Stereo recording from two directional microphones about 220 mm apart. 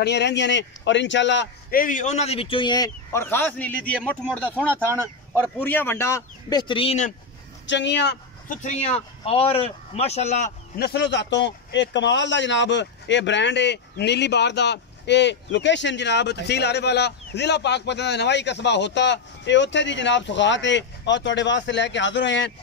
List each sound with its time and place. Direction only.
0.0 s a man's voice: 50° left (ahead or behind); by 7.2 s 30° left (ahead or behind)
7.6 s a man's voice: 55° left (ahead or behind)
8.5 s a man's voice: 30° left (ahead or behind)
10.8 s a man's voice: 50° left (ahead or behind)